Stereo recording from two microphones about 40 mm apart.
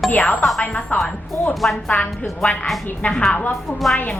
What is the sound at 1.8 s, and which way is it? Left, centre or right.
Speech, left.